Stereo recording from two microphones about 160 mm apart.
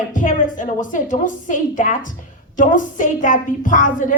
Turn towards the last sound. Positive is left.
turn(degrees=55)  # may be behind; listen again after turning